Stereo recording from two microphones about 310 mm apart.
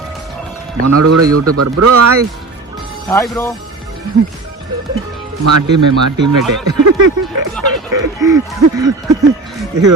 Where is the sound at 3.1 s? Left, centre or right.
Centre.